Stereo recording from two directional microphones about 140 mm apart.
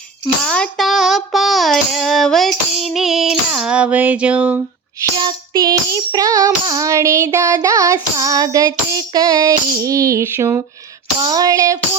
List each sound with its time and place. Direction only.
0.4 s child singing: 5° left (ahead or behind); by 4.6 s 10° right (ahead or behind)
5.0 s music: 30° right (ahead or behind)